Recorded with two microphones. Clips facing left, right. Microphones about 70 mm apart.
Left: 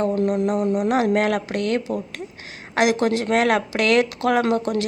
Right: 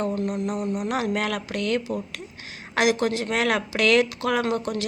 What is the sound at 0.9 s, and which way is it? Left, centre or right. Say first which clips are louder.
A woman's voice: left 6 dB; left.